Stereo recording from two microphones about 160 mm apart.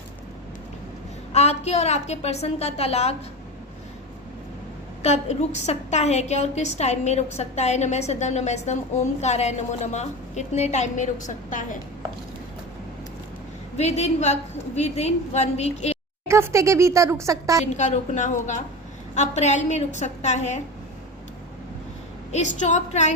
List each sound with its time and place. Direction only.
1.3 s a woman's voice: 40° left (ahead or behind)
5.0 s a woman's voice: 45° left (ahead or behind)
13.7 s a woman's voice: 45° left (ahead or behind)
16.2 s speech: 15° right (ahead or behind)
17.7 s a woman's voice: 50° left (ahead or behind)
22.3 s a woman's voice: 45° left (ahead or behind)